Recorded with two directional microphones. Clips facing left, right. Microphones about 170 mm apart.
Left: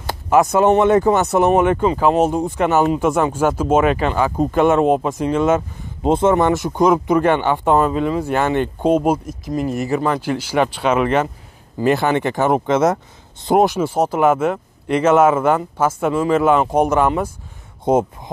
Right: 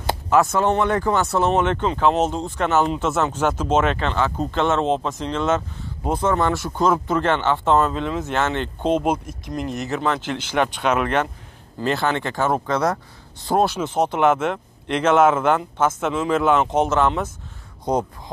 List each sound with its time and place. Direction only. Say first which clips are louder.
0.3 s speech: left 5 dB; 15° left (ahead or behind)
6.0 s speech: left 6 dB; 25° left (ahead or behind)
17.9 s speech: left 6 dB; 20° left (ahead or behind)